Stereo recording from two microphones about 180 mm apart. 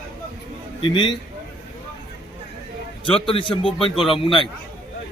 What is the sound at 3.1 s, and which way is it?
Speech, 30° left (ahead or behind).